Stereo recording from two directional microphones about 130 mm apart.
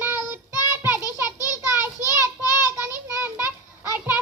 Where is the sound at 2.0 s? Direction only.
25° left (ahead or behind).